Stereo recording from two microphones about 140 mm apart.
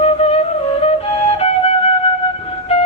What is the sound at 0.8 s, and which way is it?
Flute, 45° left (ahead or behind).